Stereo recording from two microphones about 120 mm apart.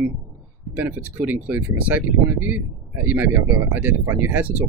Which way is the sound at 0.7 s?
15° right (ahead or behind).